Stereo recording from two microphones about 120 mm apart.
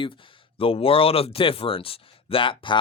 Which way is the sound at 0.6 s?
50° left (ahead or behind).